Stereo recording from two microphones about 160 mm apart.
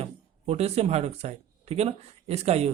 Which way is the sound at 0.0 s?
40° right (ahead or behind).